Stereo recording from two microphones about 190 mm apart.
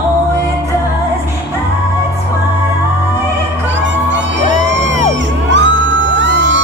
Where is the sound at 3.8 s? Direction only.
75° right (ahead or behind).